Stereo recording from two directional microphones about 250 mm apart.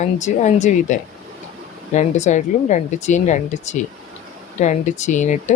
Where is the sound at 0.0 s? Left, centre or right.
Left.